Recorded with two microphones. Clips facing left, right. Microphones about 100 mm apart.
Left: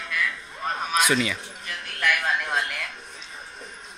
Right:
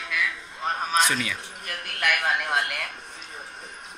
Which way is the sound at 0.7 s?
35° right (ahead or behind).